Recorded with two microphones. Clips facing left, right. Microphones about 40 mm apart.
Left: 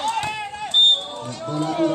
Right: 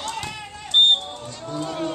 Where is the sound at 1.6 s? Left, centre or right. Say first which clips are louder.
Left 7 dB; left.